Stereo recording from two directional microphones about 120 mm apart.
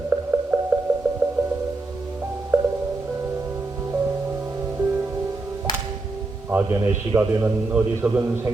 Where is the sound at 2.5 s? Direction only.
20° right (ahead or behind).